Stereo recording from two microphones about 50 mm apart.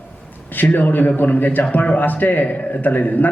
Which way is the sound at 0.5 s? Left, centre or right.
Left.